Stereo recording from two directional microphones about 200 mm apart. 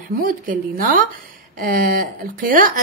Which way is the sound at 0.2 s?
45° right (ahead or behind).